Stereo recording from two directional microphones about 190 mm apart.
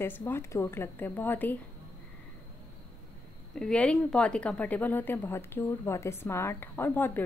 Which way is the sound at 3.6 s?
5° left (ahead or behind).